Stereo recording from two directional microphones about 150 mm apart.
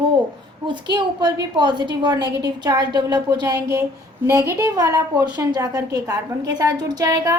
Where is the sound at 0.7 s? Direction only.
30° right (ahead or behind).